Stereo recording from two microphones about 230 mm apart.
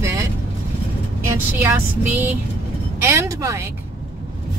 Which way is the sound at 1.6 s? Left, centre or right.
Centre.